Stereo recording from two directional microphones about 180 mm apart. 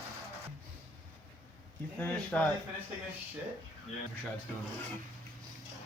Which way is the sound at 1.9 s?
10° left (ahead or behind).